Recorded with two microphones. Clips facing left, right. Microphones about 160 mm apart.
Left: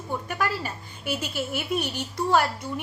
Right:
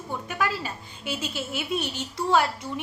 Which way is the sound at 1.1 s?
10° left (ahead or behind).